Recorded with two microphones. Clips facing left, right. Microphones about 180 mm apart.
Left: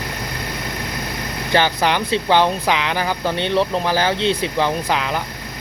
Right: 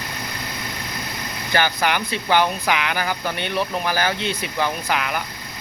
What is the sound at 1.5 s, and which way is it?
Speech, 25° left (ahead or behind).